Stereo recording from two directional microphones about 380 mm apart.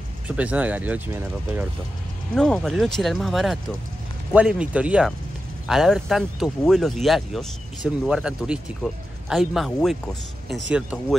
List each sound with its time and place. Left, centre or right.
0.3 s speech: centre